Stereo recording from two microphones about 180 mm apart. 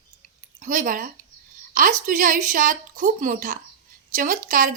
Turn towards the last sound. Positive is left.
turn(degrees=-50)  # may be behind; listen again after turning